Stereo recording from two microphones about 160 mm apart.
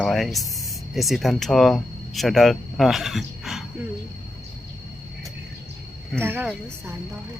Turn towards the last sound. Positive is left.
turn(degrees=-15)  # may be behind; listen again after turning